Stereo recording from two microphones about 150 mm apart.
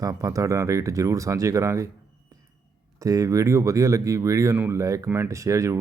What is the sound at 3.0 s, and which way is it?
Speech, 20° right (ahead or behind).